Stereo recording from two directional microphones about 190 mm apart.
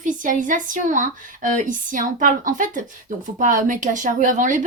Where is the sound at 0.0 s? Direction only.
45° right (ahead or behind).